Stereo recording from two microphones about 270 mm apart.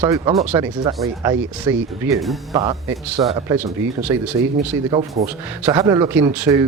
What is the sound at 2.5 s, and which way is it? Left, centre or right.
A man's voice, centre.